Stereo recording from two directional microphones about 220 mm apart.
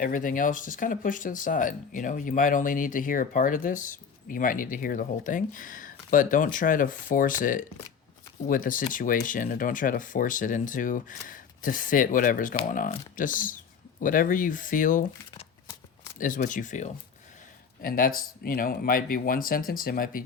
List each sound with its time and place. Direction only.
0.0 s speech: 40° left (ahead or behind)